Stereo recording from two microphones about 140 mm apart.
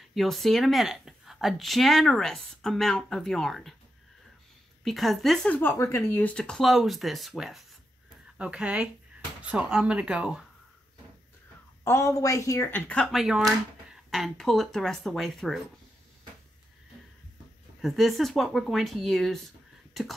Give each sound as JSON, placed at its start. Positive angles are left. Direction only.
{"t": 0.1, "sound": "a woman's voice", "side_deg": 0}
{"t": 4.8, "sound": "a woman's voice", "side_deg": 0}
{"t": 11.8, "sound": "a woman's voice", "side_deg": 20}
{"t": 17.8, "sound": "a woman's voice", "side_deg": 0}